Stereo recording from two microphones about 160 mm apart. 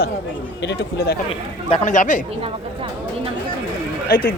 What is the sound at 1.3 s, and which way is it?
Speech, 35° left (ahead or behind).